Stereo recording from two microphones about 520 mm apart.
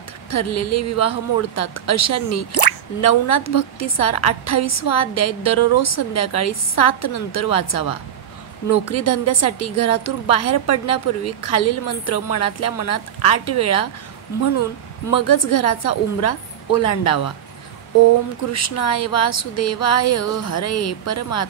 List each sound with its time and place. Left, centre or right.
0.3 s a woman's voice: left
15.0 s a woman's voice: left
18.5 s a woman's voice: left